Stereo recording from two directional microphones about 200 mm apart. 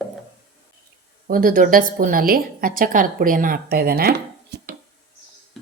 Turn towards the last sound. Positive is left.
turn(degrees=-50)  # may be behind; listen again after turning